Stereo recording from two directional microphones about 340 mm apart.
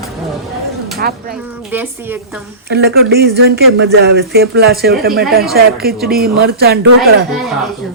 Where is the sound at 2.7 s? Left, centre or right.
Right.